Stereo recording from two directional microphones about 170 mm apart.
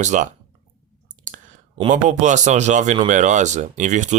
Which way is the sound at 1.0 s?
45° right (ahead or behind).